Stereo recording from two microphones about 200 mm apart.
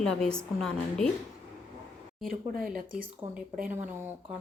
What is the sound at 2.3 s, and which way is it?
Speech, 45° right (ahead or behind).